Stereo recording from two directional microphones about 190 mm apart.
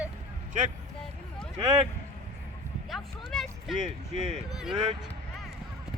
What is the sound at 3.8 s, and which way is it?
Speech, 35° right (ahead or behind).